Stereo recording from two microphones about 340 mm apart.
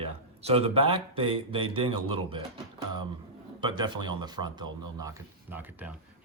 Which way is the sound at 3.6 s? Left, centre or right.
Centre.